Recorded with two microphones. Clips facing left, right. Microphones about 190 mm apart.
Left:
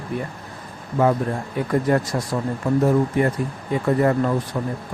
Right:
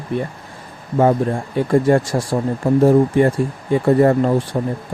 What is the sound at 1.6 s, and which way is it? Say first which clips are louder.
Speech: right 6 dB; 30° right (ahead or behind).